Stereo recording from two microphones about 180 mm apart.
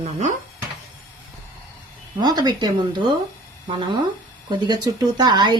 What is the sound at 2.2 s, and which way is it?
Speech, 25° right (ahead or behind).